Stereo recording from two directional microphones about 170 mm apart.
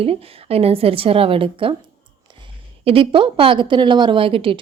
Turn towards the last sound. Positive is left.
turn(degrees=-30)  # may be behind; listen again after turning